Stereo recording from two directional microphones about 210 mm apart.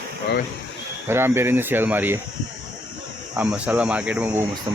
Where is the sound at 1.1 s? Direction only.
10° right (ahead or behind).